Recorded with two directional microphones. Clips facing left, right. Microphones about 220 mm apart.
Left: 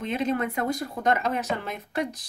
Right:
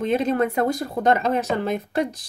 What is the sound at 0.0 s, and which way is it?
Speech, 40° right (ahead or behind).